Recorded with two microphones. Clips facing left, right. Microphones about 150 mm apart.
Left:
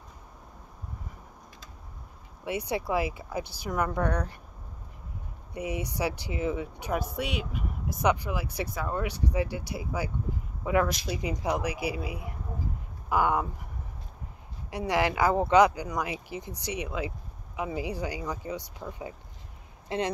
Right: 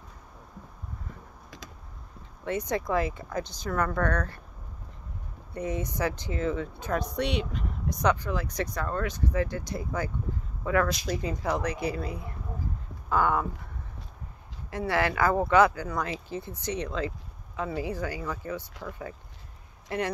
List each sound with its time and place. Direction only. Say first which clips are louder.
2.4 s speech: right 1 dB; 10° left (ahead or behind)
5.5 s speech: right 1 dB; 10° left (ahead or behind)
14.7 s speech: even; 15° left (ahead or behind)